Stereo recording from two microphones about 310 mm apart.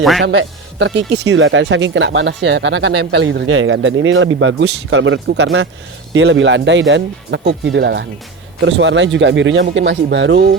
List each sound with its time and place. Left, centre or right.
0.2 s speech: right